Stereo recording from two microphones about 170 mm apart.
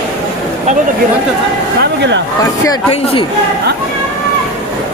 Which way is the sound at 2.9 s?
35° left (ahead or behind).